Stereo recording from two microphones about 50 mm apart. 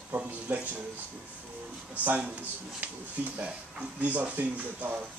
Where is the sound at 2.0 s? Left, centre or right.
Right.